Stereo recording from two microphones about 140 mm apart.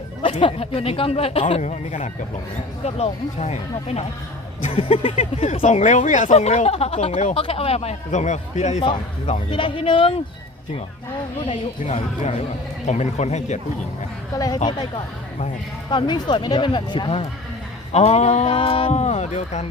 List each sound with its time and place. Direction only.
0.2 s speech: 40° left (ahead or behind); by 8.8 s 55° left (ahead or behind)
8.8 s speech: 40° left (ahead or behind)
11.9 s speech: 45° left (ahead or behind)
14.3 s speech: 25° left (ahead or behind)
17.9 s speech: 50° left (ahead or behind)
18.5 s speech: 40° left (ahead or behind)